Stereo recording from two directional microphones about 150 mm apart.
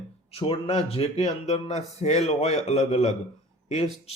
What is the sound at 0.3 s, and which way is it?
Speech, 40° left (ahead or behind).